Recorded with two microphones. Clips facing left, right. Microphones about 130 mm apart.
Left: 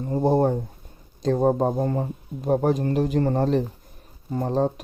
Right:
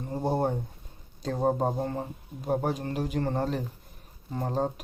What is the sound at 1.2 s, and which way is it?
Speech, 40° left (ahead or behind).